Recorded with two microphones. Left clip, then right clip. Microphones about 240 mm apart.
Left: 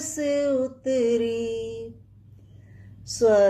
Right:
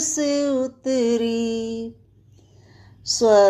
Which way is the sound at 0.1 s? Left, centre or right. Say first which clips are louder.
Even; centre.